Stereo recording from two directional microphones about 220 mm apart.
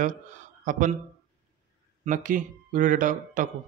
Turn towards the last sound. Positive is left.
turn(degrees=-35)  # may be behind; listen again after turning